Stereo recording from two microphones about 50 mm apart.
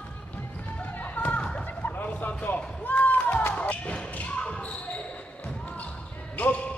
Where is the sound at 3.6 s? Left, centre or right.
Left.